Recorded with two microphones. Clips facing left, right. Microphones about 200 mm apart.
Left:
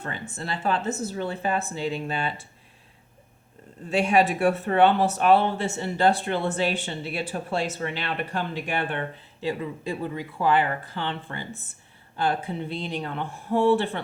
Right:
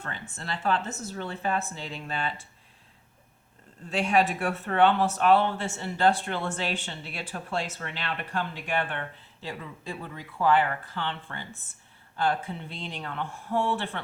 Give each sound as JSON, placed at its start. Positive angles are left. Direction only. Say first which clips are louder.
{"t": 0.0, "sound": "speech", "louder": "left 5 dB", "side_deg": 10}
{"t": 3.8, "sound": "speech", "louder": "left 3 dB", "side_deg": 15}